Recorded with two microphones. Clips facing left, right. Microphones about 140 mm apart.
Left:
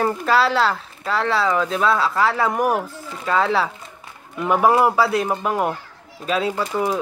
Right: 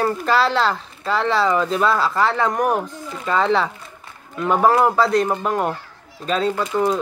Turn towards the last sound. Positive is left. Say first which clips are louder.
# right 2 dB
turn(degrees=10)  # may be behind; listen again after turning